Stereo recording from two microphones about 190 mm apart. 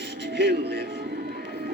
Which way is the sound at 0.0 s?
60° right (ahead or behind).